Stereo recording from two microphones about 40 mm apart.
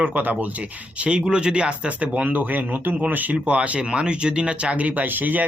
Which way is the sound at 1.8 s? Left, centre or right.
Right.